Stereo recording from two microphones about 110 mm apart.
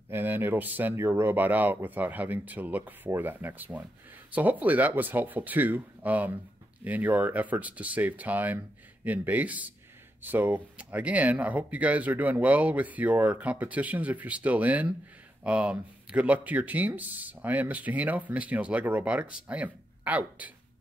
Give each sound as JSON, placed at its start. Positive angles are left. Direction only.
{"t": 0.1, "sound": "speech", "side_deg": -20}